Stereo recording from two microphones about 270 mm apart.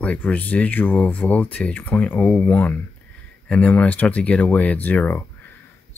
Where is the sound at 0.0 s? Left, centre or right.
Centre.